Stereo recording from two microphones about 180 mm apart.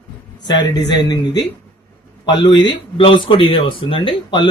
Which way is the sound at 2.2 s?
25° left (ahead or behind).